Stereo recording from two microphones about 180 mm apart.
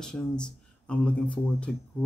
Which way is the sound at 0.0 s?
5° left (ahead or behind).